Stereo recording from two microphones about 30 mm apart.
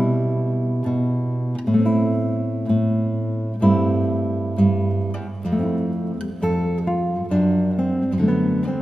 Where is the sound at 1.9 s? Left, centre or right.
Centre.